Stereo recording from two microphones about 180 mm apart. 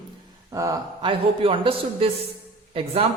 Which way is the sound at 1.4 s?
30° right (ahead or behind).